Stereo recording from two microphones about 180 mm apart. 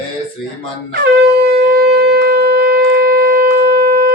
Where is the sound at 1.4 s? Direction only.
60° right (ahead or behind).